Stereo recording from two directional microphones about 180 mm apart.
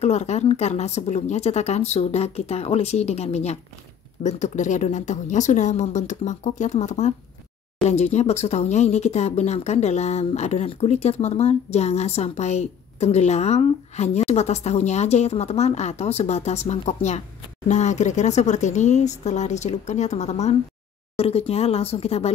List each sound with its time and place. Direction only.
0.0 s speech: 35° left (ahead or behind)